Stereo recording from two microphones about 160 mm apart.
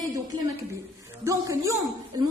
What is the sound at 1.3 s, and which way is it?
Speech, 20° right (ahead or behind).